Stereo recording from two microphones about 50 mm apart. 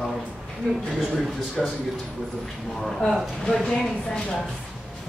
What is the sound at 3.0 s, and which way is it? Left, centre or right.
A woman's voice, centre.